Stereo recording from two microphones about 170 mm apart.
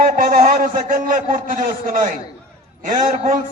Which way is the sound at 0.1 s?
60° right (ahead or behind).